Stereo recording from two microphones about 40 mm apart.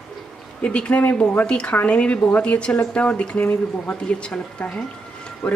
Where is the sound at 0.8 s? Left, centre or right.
Left.